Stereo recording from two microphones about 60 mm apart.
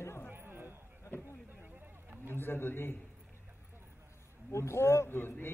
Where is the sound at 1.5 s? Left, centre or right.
Right.